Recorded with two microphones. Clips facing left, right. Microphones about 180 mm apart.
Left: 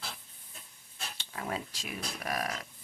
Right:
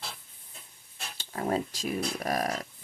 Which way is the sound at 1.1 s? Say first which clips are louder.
Right 8 dB; 40° right (ahead or behind).